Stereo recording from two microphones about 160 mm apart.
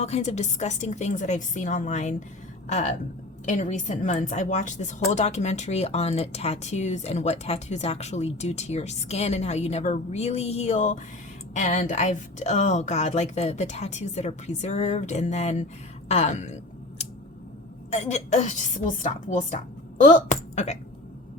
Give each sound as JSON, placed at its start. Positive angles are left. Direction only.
{"t": 0.0, "sound": "a woman's voice", "side_deg": 45}
{"t": 17.9, "sound": "a woman's voice", "side_deg": 45}